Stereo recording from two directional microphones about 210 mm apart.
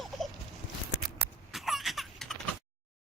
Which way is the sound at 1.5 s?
Centre (ahead or behind).